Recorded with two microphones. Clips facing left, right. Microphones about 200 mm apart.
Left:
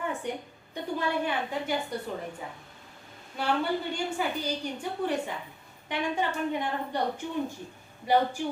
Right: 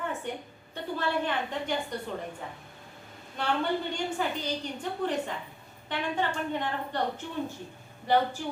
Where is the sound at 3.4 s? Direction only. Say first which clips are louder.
Left 1 dB; 10° left (ahead or behind).